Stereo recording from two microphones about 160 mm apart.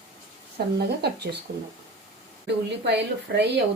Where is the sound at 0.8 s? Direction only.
90° right.